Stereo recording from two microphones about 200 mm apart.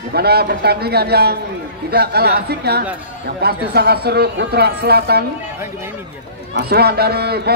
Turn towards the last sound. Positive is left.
turn(degrees=-55)  # may be behind; listen again after turning